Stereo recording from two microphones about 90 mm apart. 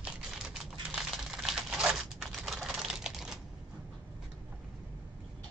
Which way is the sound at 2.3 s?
Centre (ahead or behind).